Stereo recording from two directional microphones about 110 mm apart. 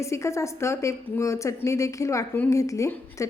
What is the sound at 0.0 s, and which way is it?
A woman's voice, 25° left (ahead or behind).